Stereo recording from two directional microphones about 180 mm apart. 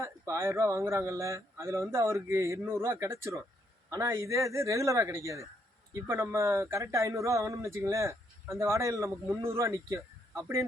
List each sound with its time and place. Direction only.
0.0 s speech: 15° right (ahead or behind)